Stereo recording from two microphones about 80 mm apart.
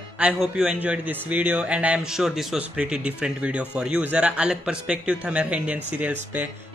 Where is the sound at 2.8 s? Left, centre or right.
Centre.